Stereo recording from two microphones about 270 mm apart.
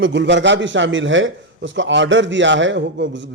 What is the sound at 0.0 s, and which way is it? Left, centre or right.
A man's voice, right.